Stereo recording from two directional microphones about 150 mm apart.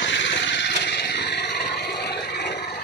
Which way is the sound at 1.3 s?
90° left.